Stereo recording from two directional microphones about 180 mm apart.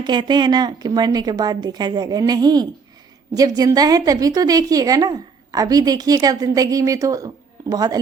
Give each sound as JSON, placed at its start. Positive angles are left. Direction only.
{"t": 0.0, "sound": "a woman's voice", "side_deg": -25}